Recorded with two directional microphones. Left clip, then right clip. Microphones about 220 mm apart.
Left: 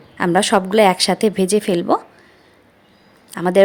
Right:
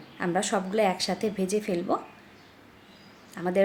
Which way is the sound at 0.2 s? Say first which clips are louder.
Left 12 dB; 45° left (ahead or behind).